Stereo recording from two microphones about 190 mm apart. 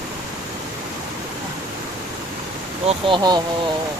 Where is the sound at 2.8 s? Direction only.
25° right (ahead or behind).